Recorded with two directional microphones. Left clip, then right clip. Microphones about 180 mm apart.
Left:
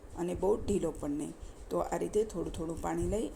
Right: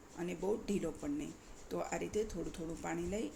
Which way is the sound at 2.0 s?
15° left (ahead or behind).